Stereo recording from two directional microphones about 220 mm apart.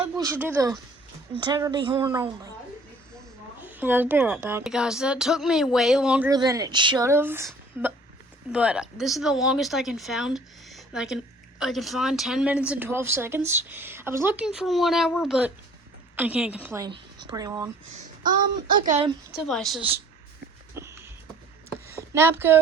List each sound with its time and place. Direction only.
0.0 s a woman's voice: 10° right (ahead or behind)
3.6 s speech: 10° right (ahead or behind)
6.3 s speech: 15° right (ahead or behind)
17.9 s a sound: 40° right (ahead or behind)
18.9 s a woman's voice: 30° right (ahead or behind)
19.4 s speech: centre (ahead or behind)
20.7 s a sound: 10° right (ahead or behind)